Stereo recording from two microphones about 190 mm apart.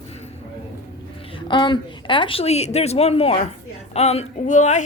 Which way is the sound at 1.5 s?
25° left (ahead or behind).